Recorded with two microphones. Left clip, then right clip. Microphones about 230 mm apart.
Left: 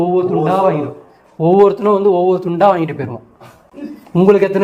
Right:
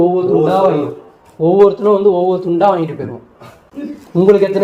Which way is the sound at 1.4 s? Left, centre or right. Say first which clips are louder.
Right 1 dB; left.